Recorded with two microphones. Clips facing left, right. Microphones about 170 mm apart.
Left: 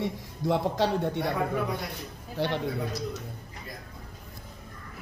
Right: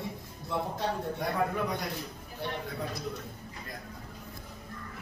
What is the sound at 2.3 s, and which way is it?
Speech, 90° left.